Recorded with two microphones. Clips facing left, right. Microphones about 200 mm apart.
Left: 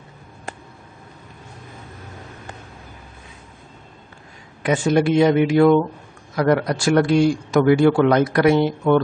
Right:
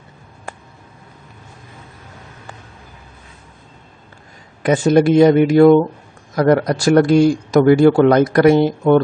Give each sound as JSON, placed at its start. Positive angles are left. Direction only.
{"t": 4.6, "sound": "a man's voice", "side_deg": -40}